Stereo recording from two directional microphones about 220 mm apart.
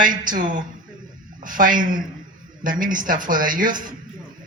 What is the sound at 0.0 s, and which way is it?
A woman's voice, 35° right (ahead or behind).